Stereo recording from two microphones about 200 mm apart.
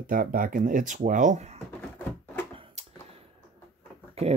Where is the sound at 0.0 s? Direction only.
45° right (ahead or behind).